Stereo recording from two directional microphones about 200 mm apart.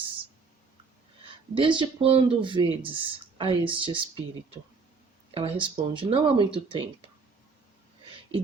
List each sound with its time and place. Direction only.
1.5 s speech: 25° right (ahead or behind)
5.3 s speech: 25° right (ahead or behind)